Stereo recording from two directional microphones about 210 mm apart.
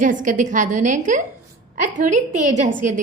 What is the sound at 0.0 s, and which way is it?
Speech, 40° right (ahead or behind).